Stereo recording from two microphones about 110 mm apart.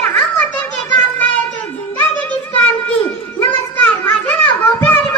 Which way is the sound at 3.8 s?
20° left (ahead or behind).